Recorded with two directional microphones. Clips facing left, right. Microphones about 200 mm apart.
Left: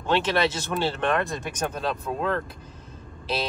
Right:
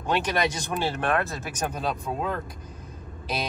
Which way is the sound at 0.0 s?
15° right (ahead or behind).